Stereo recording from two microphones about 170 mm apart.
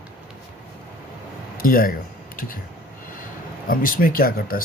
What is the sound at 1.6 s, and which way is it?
Speech, 55° left (ahead or behind).